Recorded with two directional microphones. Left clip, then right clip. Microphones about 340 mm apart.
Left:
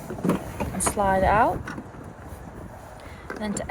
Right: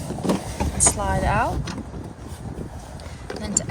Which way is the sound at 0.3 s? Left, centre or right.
Right.